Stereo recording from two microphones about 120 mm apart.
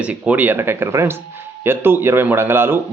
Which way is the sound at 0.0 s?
10° right (ahead or behind).